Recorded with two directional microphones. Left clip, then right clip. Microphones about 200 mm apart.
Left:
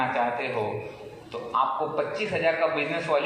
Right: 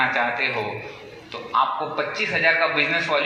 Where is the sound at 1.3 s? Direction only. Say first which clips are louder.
Right 4 dB; 55° left (ahead or behind).